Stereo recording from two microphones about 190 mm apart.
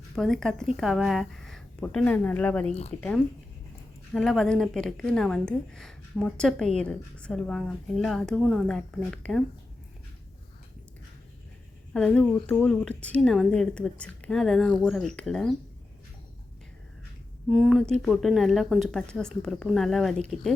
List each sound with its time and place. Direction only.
0.2 s a woman's voice: centre (ahead or behind)
2.9 s speech: 35° right (ahead or behind)
4.1 s a woman's voice: 5° left (ahead or behind)
11.9 s a woman's voice: 5° left (ahead or behind)
17.5 s a woman's voice: 5° right (ahead or behind)